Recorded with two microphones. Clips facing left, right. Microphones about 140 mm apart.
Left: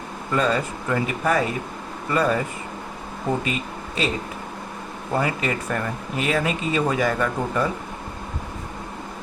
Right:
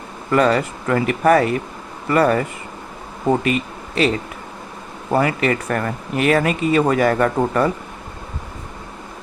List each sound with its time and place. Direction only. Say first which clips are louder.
0.3 s speech: right 6 dB; 70° right (ahead or behind)
3.4 s speech: right 6 dB; 60° right (ahead or behind)
5.1 s speech: right 6 dB; 65° right (ahead or behind)